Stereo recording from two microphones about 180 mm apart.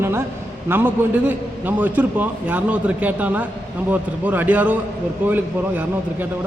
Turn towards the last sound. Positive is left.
turn(degrees=-10)  # may be behind; listen again after turning